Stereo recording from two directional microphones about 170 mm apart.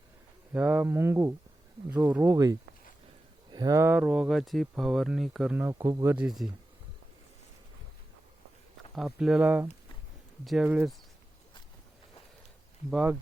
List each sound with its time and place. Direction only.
0.5 s speech: 10° right (ahead or behind)
5.7 s speech: 20° right (ahead or behind)
6.1 s speech: centre (ahead or behind)
9.0 s speech: centre (ahead or behind)
12.9 s speech: 5° right (ahead or behind)